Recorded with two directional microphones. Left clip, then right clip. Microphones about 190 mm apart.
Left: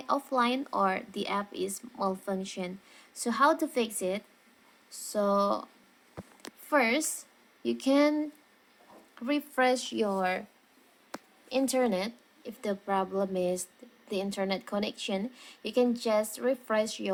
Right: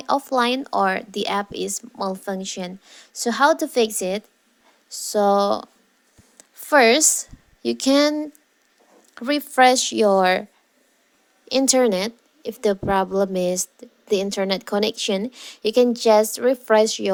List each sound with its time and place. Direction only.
0.0 s speech: 40° right (ahead or behind)
6.7 s a woman's voice: 45° right (ahead or behind)
11.4 s a woman's voice: 40° right (ahead or behind)